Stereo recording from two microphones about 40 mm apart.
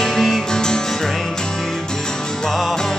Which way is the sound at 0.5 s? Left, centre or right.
Centre.